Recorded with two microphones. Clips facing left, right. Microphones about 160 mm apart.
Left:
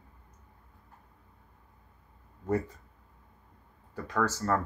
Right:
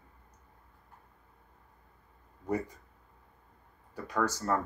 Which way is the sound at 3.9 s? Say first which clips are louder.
Left 1 dB; 10° right (ahead or behind).